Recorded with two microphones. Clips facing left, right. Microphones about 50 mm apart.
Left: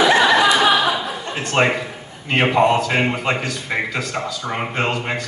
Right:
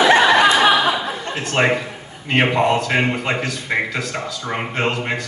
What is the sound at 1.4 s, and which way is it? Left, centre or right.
Speech, centre.